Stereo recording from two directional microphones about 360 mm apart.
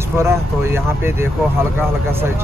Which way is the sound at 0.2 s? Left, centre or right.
Centre.